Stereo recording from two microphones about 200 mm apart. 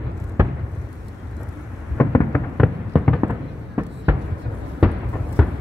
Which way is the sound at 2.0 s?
15° left (ahead or behind).